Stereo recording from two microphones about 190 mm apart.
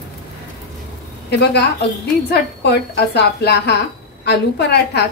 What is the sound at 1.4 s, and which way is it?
Speech, 60° left (ahead or behind).